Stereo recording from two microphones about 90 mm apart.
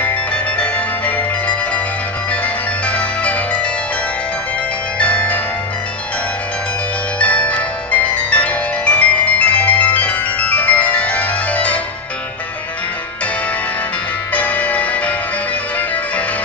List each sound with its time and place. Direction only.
0.0 s music: 15° left (ahead or behind)
4.9 s music: 15° left (ahead or behind)
7.2 s music: 15° left (ahead or behind)
14.3 s music: 15° left (ahead or behind)